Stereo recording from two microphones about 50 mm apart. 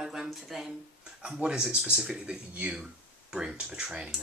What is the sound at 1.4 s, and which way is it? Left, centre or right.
Speech, centre.